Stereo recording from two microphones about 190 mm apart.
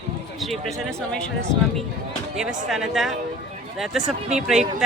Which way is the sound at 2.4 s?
Centre (ahead or behind).